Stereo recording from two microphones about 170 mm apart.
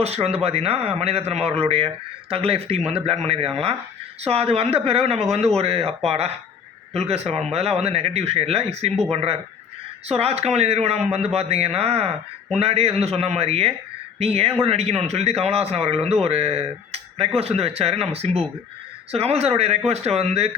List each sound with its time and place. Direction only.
0.0 s speech: 40° right (ahead or behind)